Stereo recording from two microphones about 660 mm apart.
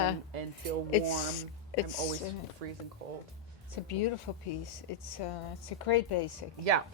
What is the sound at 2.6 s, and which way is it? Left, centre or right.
Speech, right.